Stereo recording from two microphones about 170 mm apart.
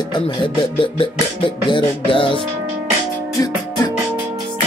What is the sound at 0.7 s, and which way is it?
Music, 30° left (ahead or behind).